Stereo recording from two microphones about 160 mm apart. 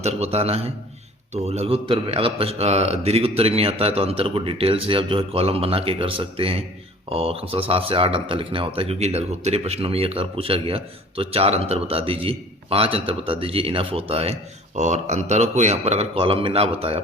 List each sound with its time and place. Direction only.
0.0 s speech: 40° right (ahead or behind)